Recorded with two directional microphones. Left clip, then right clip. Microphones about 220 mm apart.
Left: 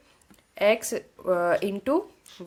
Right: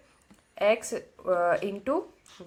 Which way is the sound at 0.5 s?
45° left (ahead or behind).